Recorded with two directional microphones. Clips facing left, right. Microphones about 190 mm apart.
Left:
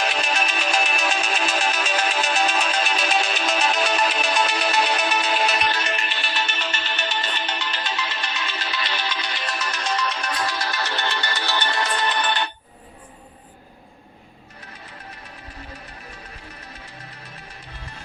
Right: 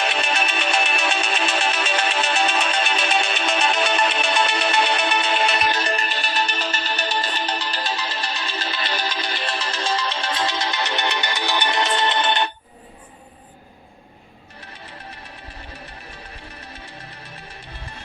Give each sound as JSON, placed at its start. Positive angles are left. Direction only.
{"t": 0.0, "sound": "music", "side_deg": 0}
{"t": 5.8, "sound": "music", "side_deg": -35}